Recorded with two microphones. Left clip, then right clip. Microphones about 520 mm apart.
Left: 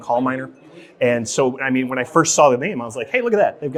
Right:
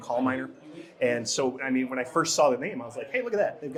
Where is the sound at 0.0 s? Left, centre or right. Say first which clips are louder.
Left 8 dB; left.